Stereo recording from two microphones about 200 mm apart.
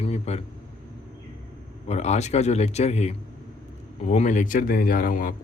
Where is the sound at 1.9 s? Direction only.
35° left (ahead or behind).